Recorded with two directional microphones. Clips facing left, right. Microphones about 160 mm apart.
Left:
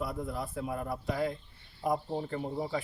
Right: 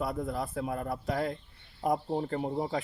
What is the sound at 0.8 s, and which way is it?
Speech, 50° right (ahead or behind).